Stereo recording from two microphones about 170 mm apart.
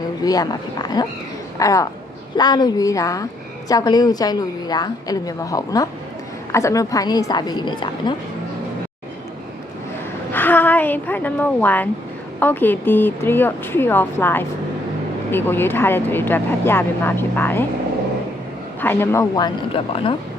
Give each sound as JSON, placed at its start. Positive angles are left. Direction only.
{"t": 0.2, "sound": "a woman's voice", "side_deg": 20}
{"t": 10.3, "sound": "speech", "side_deg": 10}
{"t": 18.8, "sound": "speech", "side_deg": 10}
{"t": 19.7, "sound": "a woman's voice", "side_deg": 30}